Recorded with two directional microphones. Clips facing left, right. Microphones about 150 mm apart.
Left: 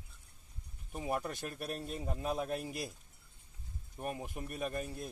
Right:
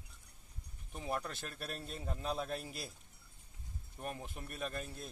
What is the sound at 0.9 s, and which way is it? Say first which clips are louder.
Speech: left 3 dB; 5° left (ahead or behind).